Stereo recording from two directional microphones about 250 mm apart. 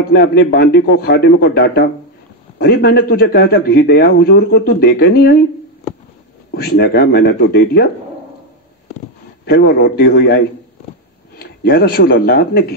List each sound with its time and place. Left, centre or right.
0.1 s a man's voice: left
6.5 s a man's voice: left
9.5 s a man's voice: left